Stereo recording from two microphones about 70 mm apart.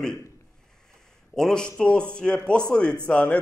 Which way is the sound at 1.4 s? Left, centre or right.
Centre.